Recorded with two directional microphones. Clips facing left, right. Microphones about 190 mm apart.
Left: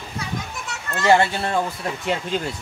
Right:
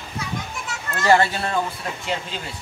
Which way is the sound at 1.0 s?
20° left (ahead or behind).